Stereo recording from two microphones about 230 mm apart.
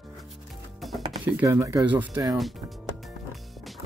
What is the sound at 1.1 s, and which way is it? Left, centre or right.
Speech, centre.